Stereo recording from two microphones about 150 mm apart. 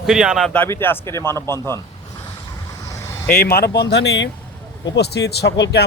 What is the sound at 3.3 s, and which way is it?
Speech, 90° left.